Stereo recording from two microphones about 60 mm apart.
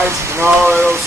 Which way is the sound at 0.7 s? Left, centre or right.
Right.